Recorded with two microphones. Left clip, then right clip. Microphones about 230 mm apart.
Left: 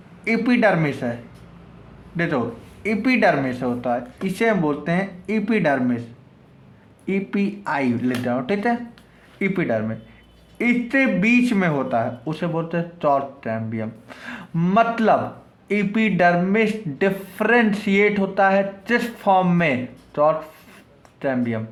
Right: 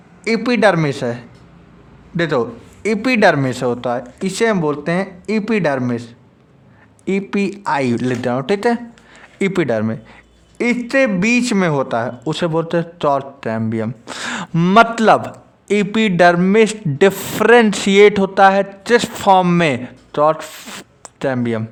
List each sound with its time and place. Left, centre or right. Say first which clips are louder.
0.3 s a man's voice: right 4 dB; right